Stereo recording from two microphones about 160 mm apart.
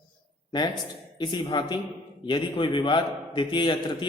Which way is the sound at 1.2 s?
25° left (ahead or behind).